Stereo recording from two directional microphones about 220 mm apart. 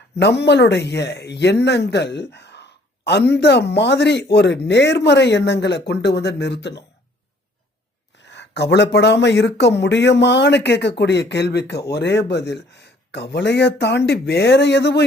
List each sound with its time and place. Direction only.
0.2 s speech: 50° left (ahead or behind)
8.3 s a sound: 50° left (ahead or behind)
8.7 s speech: 50° left (ahead or behind)